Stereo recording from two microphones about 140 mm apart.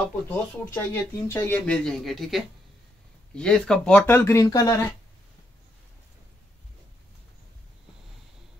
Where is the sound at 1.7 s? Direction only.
Centre (ahead or behind); by 4.7 s 25° left (ahead or behind).